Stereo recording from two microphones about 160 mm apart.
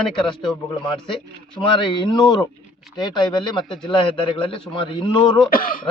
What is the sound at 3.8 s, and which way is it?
A man's voice, 30° left (ahead or behind).